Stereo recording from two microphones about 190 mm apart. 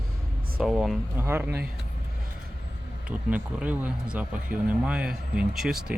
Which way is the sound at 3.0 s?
5° right (ahead or behind).